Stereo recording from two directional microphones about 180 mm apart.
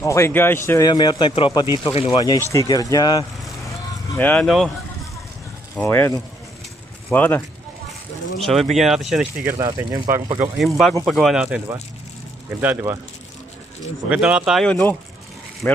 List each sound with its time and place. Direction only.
0.0 s speech: 15° left (ahead or behind)
4.1 s speech: 10° left (ahead or behind)
5.8 s speech: 10° left (ahead or behind)
8.4 s speech: centre (ahead or behind)
9.8 s speech: 20° right (ahead or behind)
10.6 s speech: centre (ahead or behind)
14.0 s speech: 5° right (ahead or behind)